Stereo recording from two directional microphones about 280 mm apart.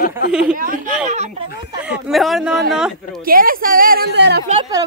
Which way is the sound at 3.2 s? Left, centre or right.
Right.